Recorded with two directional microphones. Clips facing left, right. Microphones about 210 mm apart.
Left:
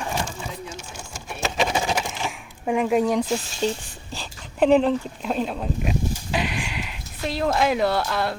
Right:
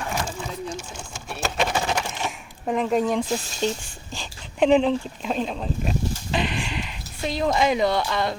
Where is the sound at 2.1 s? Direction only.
Centre (ahead or behind).